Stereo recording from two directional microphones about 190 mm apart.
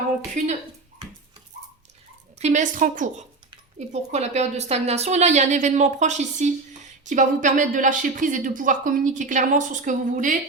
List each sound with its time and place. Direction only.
2.4 s a woman's voice: 40° right (ahead or behind)